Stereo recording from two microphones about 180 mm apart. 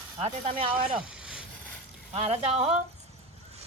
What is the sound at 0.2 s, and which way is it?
Speech, 30° right (ahead or behind).